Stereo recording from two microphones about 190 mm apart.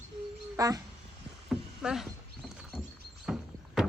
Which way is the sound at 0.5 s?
20° right (ahead or behind).